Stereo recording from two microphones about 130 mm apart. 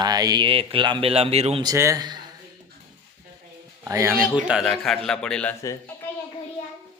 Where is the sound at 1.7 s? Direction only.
20° right (ahead or behind).